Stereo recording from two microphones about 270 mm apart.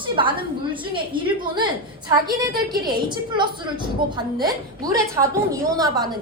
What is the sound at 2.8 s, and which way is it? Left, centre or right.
A woman's voice, centre.